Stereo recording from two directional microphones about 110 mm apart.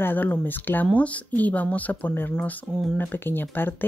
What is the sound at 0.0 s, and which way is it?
Speech, 15° left (ahead or behind).